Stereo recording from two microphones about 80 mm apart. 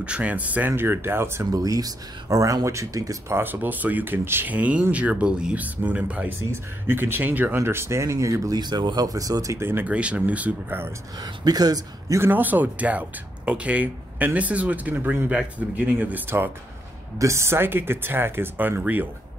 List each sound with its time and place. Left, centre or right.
0.0 s speech: centre; by 1.5 s right
1.5 s speech: right
3.3 s speech: right
8.5 s speech: right
9.6 s speech: right
9.8 s speech: centre
11.1 s speech: right
12.2 s speech: right
17.2 s speech: right